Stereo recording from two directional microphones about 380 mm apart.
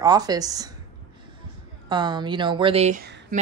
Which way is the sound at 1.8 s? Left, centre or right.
Centre.